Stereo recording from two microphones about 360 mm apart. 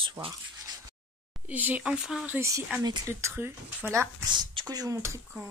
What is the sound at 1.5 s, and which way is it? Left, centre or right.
Speech, centre.